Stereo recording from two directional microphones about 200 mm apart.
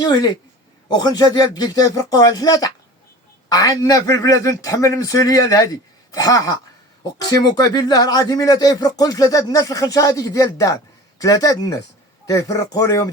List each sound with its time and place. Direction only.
0.0 s speech: 20° left (ahead or behind)